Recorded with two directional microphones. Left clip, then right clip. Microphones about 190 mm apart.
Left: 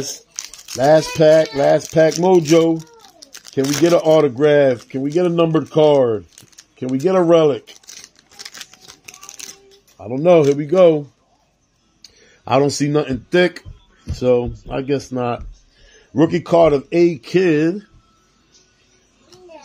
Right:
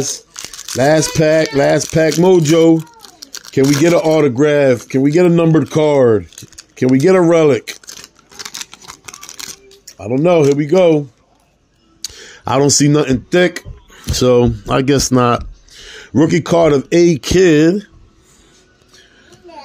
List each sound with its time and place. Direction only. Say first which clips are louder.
0.3 s a sound: right 1 dB; 10° right (ahead or behind)
0.7 s speech: right 1 dB; 25° right (ahead or behind)
3.2 s a sound: right 8 dB; 5° right (ahead or behind)
3.8 s speech: left 1 dB; 30° right (ahead or behind)
9.9 s speech: right 1 dB; 15° right (ahead or behind)
12.4 s speech: right 4 dB; 25° right (ahead or behind)
14.1 s speech: right 5 dB; 50° right (ahead or behind)
15.9 s speech: right 3 dB; 35° right (ahead or behind)